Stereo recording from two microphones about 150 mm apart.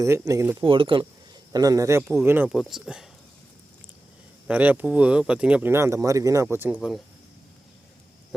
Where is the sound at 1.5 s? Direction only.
25° right (ahead or behind).